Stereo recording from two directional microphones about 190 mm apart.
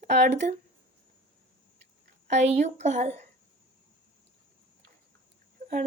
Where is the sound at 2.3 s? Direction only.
35° right (ahead or behind).